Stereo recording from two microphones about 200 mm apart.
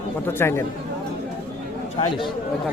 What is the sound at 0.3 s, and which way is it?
Speech, 10° left (ahead or behind).